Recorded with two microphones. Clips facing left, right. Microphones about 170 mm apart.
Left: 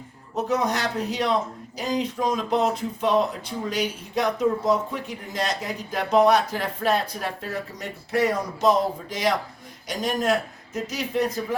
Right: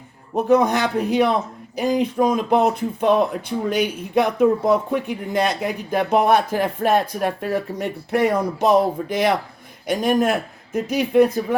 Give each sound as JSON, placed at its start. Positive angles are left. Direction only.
{"t": 0.3, "sound": "speech", "side_deg": -55}